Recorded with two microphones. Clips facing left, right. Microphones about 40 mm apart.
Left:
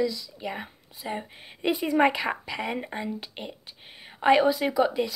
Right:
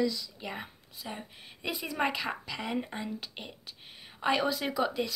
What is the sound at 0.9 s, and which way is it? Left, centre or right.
A woman's voice, left.